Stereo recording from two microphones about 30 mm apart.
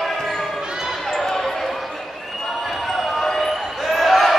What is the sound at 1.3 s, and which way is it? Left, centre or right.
Basketball bounce, centre.